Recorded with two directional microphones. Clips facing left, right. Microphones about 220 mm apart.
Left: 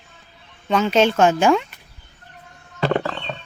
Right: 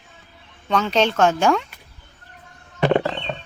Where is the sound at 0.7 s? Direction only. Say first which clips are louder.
Left 3 dB; 5° left (ahead or behind).